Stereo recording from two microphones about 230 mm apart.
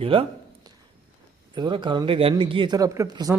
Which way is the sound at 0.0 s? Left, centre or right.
Right.